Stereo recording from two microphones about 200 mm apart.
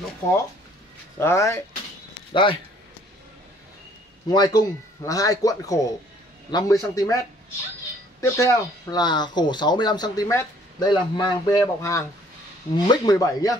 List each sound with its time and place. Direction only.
1.1 s speech: 15° left (ahead or behind)
2.3 s speech: 25° left (ahead or behind)
4.3 s speech: 20° left (ahead or behind)
8.2 s speech: 15° left (ahead or behind)